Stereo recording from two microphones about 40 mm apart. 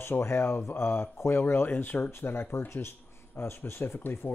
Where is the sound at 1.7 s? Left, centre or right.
Left.